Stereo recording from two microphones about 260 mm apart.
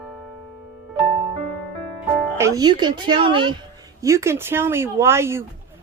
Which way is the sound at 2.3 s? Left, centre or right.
Centre.